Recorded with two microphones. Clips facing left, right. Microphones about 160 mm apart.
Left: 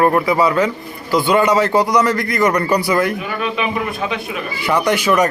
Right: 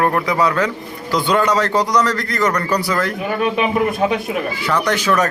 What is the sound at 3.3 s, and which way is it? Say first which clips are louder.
Speech: right 3 dB; 40° right (ahead or behind).